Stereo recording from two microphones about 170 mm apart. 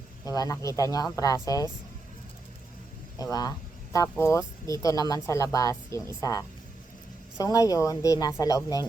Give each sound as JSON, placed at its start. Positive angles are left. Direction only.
{"t": 0.3, "sound": "speech", "side_deg": 20}
{"t": 3.2, "sound": "speech", "side_deg": 20}